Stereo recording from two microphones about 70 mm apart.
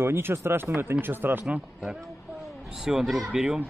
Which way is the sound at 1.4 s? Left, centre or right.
Centre.